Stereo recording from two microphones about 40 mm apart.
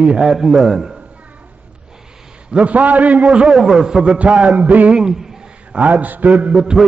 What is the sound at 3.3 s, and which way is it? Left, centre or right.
Speech, right.